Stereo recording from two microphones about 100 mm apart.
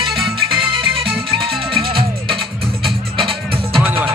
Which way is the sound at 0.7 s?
65° right (ahead or behind).